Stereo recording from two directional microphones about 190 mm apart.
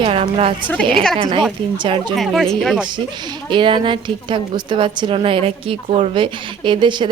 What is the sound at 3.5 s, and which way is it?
A woman's voice, 25° right (ahead or behind).